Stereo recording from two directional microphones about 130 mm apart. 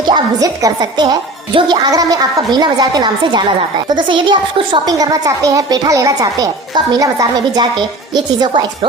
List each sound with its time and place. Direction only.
0.0 s a woman's voice: 30° right (ahead or behind)